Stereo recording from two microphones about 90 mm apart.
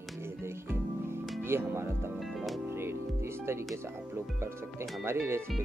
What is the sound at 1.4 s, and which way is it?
Speech, 25° right (ahead or behind).